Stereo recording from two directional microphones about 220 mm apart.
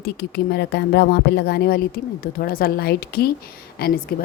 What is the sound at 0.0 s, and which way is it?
A woman's voice, 45° left (ahead or behind).